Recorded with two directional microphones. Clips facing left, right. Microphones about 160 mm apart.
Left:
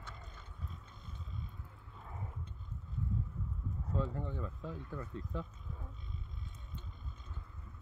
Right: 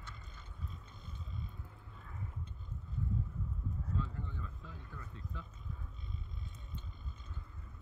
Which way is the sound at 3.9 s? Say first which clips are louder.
Left 6 dB; 45° left (ahead or behind).